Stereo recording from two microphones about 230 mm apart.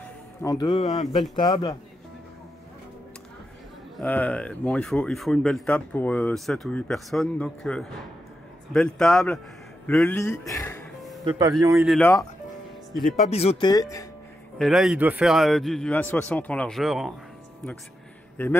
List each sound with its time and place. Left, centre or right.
0.4 s speech: centre
3.9 s speech: centre
11.2 s speech: centre
11.8 s speech: centre
13.3 s speech: left
14.6 s speech: centre
18.4 s speech: centre